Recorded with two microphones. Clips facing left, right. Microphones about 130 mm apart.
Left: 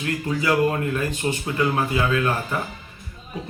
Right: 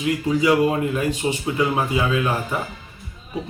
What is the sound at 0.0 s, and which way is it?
Speech, 15° right (ahead or behind).